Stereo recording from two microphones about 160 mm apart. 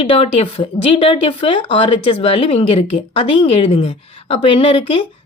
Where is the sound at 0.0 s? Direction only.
35° left (ahead or behind).